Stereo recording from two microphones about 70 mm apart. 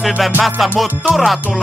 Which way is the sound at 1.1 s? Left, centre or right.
Centre.